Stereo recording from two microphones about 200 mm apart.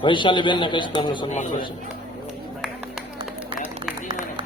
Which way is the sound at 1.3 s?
35° left (ahead or behind).